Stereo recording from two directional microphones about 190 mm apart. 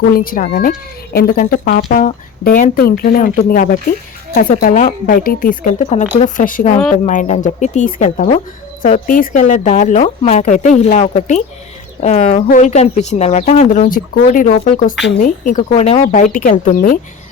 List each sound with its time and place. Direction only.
0.1 s a woman's voice: 50° left (ahead or behind)
15.7 s speech: 35° left (ahead or behind)